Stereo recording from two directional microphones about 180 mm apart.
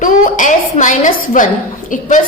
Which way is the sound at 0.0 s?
45° left (ahead or behind).